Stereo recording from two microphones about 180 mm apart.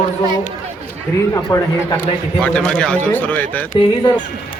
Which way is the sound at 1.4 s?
25° left (ahead or behind).